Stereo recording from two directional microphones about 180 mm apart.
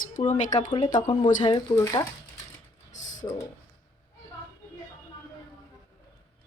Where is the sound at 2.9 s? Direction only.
45° left (ahead or behind).